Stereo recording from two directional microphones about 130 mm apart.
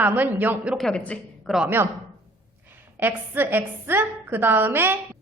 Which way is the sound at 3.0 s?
15° right (ahead or behind).